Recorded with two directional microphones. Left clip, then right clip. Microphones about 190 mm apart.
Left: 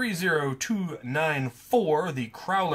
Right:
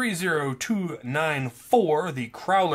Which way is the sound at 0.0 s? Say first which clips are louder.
Right 1 dB; 40° right (ahead or behind).